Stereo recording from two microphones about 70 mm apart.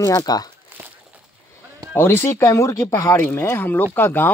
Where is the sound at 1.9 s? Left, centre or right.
Left.